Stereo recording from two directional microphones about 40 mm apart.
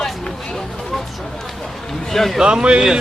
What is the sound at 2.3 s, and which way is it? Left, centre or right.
Speech, centre.